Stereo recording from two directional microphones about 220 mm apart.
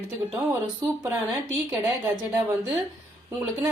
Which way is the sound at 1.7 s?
10° right (ahead or behind).